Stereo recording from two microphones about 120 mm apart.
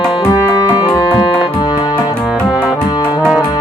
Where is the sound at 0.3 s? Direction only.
30° left (ahead or behind).